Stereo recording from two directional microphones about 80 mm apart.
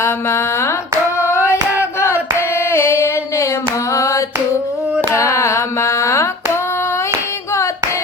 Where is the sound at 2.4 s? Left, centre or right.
Left.